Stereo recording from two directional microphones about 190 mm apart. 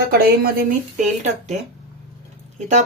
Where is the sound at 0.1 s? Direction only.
55° right (ahead or behind).